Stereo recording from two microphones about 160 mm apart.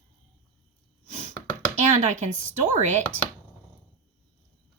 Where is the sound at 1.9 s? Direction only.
45° right (ahead or behind).